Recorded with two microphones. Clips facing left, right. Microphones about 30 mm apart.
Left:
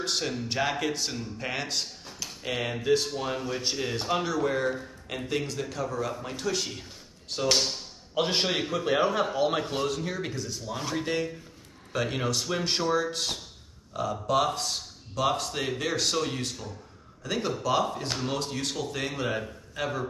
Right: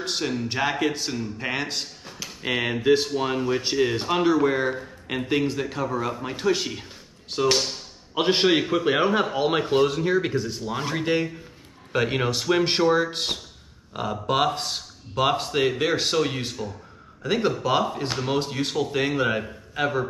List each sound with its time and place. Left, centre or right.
0.0 s a man's voice: centre